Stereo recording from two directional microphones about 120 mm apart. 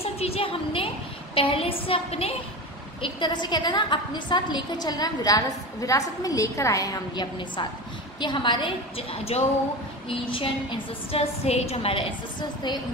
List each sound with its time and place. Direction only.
0.0 s a woman's voice: 55° left (ahead or behind)
3.0 s a woman's voice: 40° left (ahead or behind)
8.2 s a woman's voice: 40° left (ahead or behind)